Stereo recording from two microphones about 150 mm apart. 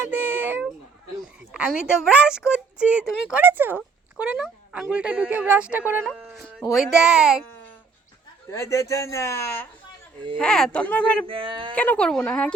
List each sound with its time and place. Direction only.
0.1 s a sound: 15° right (ahead or behind)
2.1 s speech: 5° right (ahead or behind)
8.4 s speech: 20° left (ahead or behind)
10.3 s speech: 5° left (ahead or behind)
11.3 s speech: 35° right (ahead or behind)
11.7 s speech: 10° left (ahead or behind)